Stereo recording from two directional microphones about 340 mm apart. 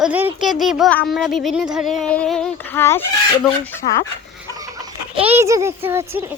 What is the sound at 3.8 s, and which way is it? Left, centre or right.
Speech, centre.